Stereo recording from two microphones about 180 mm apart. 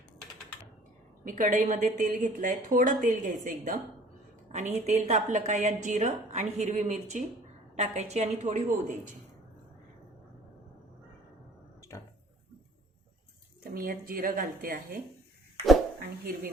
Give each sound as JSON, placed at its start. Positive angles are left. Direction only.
{"t": 1.2, "sound": "a woman's voice", "side_deg": -45}
{"t": 13.7, "sound": "speech", "side_deg": -55}